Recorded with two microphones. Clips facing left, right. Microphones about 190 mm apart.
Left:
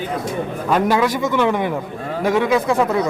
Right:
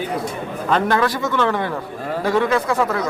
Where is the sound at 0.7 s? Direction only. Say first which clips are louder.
Left 1 dB; 10° left (ahead or behind).